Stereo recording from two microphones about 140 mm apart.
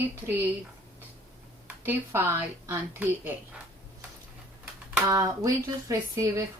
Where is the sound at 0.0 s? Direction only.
15° right (ahead or behind).